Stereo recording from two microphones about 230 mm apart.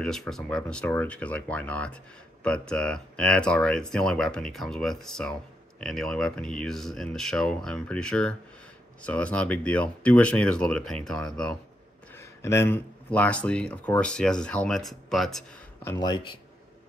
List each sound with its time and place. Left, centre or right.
0.0 s speech: centre
15.8 s speech: centre